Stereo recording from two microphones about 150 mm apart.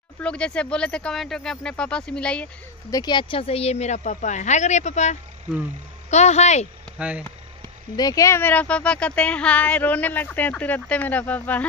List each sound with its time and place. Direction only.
0.2 s speech: 5° left (ahead or behind)
2.9 s a woman's voice: 25° left (ahead or behind); by 6.7 s 50° left (ahead or behind)
7.0 s speech: 10° right (ahead or behind)
7.9 s speech: 25° left (ahead or behind)